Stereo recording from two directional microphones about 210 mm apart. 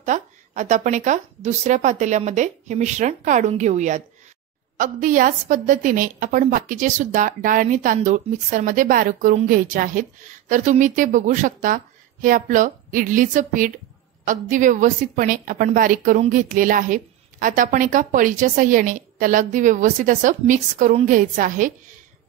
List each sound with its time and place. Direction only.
0.0 s a woman's voice: 35° right (ahead or behind)